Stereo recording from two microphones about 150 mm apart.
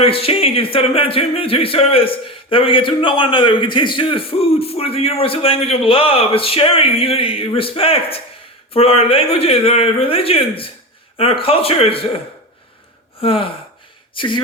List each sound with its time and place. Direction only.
0.0 s speech: 40° left (ahead or behind)
13.1 s speech: 35° left (ahead or behind)